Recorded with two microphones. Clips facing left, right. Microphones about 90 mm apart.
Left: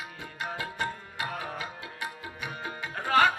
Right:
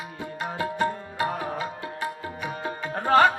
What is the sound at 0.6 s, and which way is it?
Music, 35° right (ahead or behind).